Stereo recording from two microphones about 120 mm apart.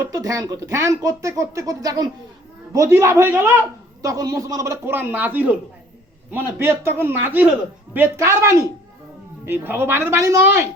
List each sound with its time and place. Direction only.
0.2 s speech: 30° right (ahead or behind)
4.0 s speech: 30° right (ahead or behind)